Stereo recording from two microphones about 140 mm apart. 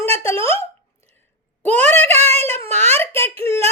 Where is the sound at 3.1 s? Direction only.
20° left (ahead or behind).